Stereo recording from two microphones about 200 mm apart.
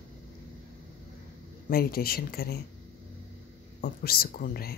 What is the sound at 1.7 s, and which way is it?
Speech, 50° left (ahead or behind).